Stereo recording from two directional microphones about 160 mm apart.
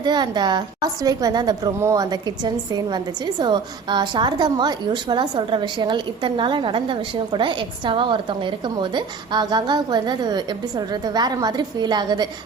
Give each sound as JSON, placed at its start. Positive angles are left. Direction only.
{"t": 0.0, "sound": "a woman's voice", "side_deg": -25}